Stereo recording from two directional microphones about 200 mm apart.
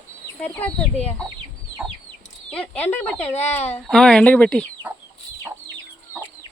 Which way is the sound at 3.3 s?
35° left (ahead or behind).